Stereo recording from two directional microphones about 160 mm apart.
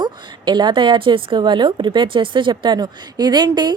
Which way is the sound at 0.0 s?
25° right (ahead or behind).